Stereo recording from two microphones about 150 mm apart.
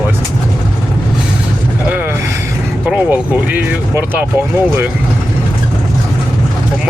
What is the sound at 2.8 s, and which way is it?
Speech, 10° right (ahead or behind).